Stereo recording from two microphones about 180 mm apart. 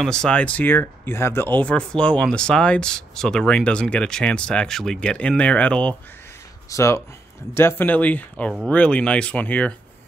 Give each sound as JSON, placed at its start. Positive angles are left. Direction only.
{"t": 0.0, "sound": "speech", "side_deg": 5}
{"t": 6.7, "sound": "speech", "side_deg": 15}